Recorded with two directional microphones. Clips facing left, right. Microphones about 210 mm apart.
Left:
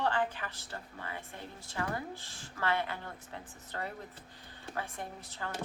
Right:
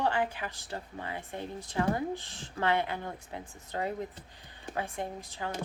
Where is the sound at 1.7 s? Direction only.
20° right (ahead or behind).